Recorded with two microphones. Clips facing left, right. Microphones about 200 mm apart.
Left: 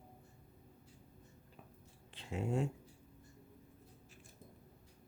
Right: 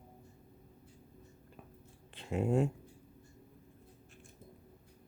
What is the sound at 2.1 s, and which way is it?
Speech, 55° right (ahead or behind).